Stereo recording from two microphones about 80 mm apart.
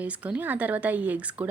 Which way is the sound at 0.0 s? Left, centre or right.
Centre.